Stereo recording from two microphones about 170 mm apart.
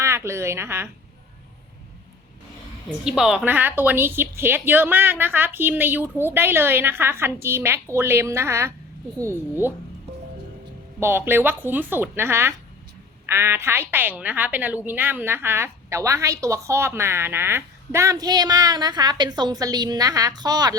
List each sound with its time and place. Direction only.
0.0 s a woman's voice: 15° right (ahead or behind)
3.0 s a woman's voice: 5° right (ahead or behind)
11.0 s a woman's voice: 15° right (ahead or behind)